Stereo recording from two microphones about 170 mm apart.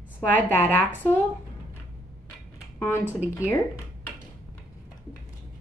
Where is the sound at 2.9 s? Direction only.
10° right (ahead or behind).